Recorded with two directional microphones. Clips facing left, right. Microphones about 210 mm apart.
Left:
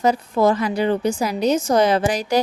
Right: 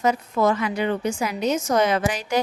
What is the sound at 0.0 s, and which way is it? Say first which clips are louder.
A woman's voice: left 3 dB; 35° left (ahead or behind).